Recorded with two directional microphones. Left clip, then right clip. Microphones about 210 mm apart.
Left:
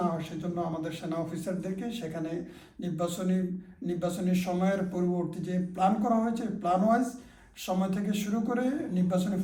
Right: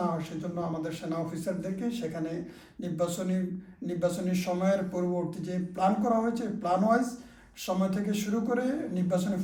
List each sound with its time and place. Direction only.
0.5 s a man's voice: 5° right (ahead or behind)